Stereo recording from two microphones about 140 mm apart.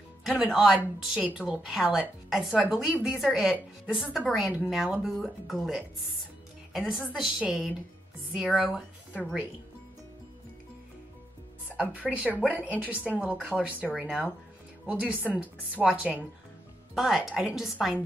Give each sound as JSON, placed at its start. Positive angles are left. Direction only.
{"t": 0.2, "sound": "a woman's voice", "side_deg": 0}
{"t": 11.7, "sound": "a woman's voice", "side_deg": -10}